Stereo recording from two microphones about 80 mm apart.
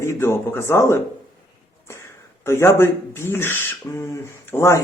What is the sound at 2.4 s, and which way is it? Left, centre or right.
Speech, left.